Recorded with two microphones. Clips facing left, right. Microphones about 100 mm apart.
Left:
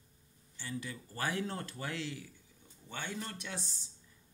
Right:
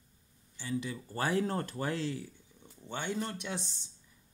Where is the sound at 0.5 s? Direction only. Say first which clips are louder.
Right 6 dB; 20° right (ahead or behind).